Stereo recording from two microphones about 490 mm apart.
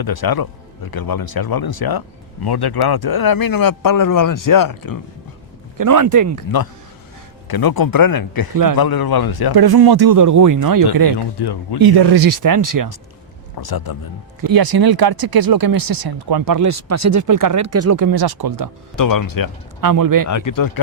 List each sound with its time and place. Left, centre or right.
0.0 s speech: left
5.7 s speech: right
7.4 s speech: left
9.6 s speech: right
11.3 s speech: left
11.8 s speech: right
13.6 s speech: left
14.4 s speech: right
18.9 s speech: left
19.8 s speech: right
20.2 s speech: left